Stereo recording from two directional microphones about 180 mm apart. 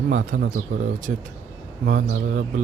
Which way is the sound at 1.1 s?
55° right (ahead or behind).